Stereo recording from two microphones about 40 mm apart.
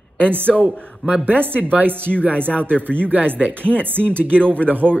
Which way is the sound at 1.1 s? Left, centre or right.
Right.